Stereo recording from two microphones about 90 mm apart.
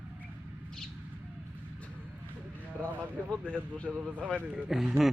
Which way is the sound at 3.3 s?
15° left (ahead or behind).